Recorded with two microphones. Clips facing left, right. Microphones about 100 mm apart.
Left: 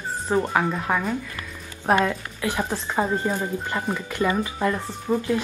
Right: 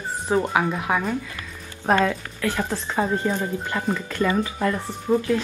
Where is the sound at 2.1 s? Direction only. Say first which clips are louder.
Right 1 dB; 15° left (ahead or behind).